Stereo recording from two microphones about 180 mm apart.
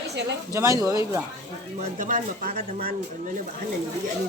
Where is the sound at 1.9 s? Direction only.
50° right (ahead or behind).